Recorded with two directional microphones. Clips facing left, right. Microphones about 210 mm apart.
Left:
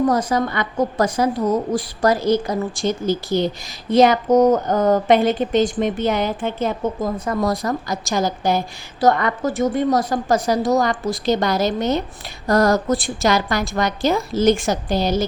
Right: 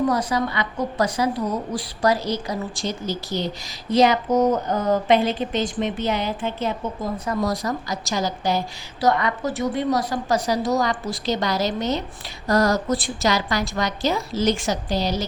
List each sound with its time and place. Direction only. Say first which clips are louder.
0.1 s a woman's voice: left 3 dB; 45° left (ahead or behind)